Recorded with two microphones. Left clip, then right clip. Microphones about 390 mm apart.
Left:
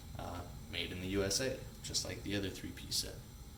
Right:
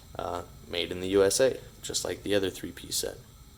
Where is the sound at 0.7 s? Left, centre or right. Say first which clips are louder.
Right 11 dB; centre.